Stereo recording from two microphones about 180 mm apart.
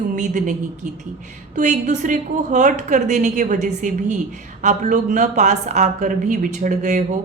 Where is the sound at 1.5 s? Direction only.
40° right (ahead or behind).